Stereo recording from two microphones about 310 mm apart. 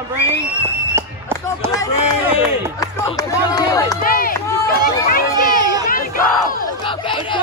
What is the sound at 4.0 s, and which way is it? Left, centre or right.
Speech, left.